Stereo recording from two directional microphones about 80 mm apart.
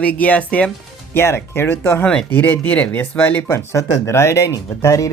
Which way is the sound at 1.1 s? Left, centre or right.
Left.